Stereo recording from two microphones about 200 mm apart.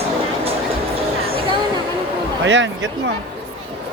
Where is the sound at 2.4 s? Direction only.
65° right (ahead or behind).